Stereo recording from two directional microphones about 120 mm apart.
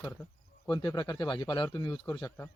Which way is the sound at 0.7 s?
35° left (ahead or behind).